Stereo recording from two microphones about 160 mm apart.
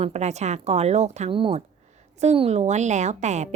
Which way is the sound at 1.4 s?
35° right (ahead or behind).